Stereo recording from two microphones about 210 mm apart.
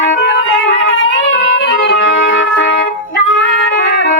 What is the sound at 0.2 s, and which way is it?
Music, 60° left (ahead or behind).